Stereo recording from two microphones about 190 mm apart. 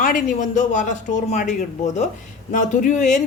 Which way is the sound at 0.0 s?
45° left (ahead or behind).